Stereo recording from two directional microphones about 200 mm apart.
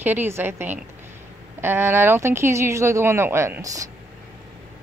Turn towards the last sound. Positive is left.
turn(degrees=-15)  # may be behind; listen again after turning